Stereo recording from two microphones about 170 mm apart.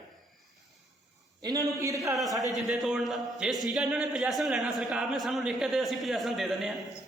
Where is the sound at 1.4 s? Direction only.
20° right (ahead or behind).